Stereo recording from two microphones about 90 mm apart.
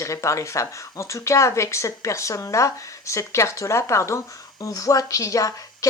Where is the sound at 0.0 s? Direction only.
35° left (ahead or behind).